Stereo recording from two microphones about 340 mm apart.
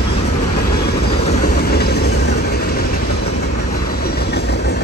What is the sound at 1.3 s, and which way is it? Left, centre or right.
Vehicle, left.